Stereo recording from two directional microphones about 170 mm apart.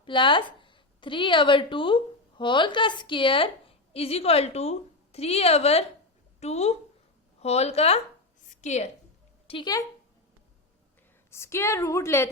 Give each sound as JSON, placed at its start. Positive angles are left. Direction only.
{"t": 0.0, "sound": "a woman's voice", "side_deg": 30}
{"t": 9.5, "sound": "a woman's voice", "side_deg": 25}
{"t": 11.3, "sound": "a woman's voice", "side_deg": 15}